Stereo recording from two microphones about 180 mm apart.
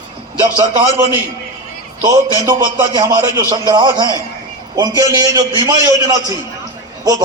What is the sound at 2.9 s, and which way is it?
A man's voice, 20° right (ahead or behind).